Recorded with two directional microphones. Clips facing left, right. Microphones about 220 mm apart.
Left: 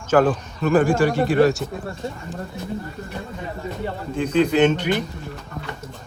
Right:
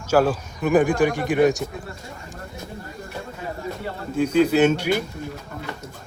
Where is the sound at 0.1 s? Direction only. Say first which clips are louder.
Left 2 dB; 10° right (ahead or behind).